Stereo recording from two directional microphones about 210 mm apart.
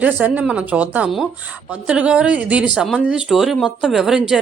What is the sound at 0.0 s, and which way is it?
A woman's voice, 5° right (ahead or behind).